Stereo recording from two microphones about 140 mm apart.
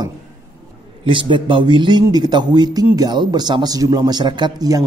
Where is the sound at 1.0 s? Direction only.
35° right (ahead or behind).